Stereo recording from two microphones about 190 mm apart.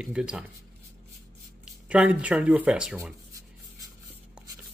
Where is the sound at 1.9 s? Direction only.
5° right (ahead or behind).